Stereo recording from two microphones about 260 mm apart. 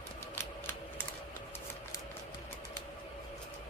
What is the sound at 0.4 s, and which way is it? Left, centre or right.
Typewriter, centre.